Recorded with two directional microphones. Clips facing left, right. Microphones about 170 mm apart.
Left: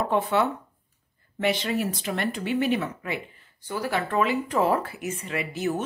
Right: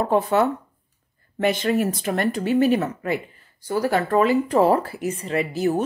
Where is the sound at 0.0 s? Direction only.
40° right (ahead or behind).